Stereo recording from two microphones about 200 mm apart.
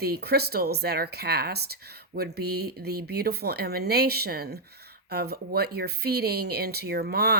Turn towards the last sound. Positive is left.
turn(degrees=-50)  # may be behind; listen again after turning